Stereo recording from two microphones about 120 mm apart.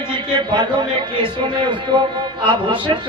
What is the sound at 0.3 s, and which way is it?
A man's voice, 40° right (ahead or behind).